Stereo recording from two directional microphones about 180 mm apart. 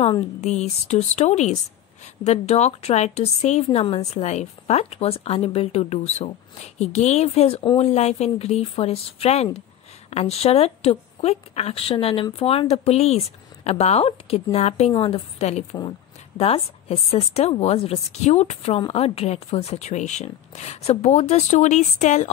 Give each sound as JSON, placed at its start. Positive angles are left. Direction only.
{"t": 0.0, "sound": "a woman's voice", "side_deg": 35}